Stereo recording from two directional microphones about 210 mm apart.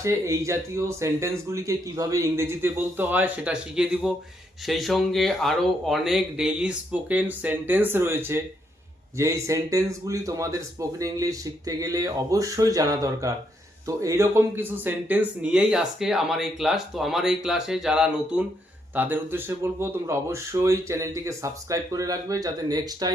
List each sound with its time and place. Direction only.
0.0 s speech: 15° right (ahead or behind)